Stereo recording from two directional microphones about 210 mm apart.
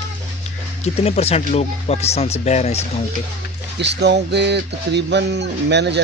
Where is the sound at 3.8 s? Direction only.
55° right (ahead or behind).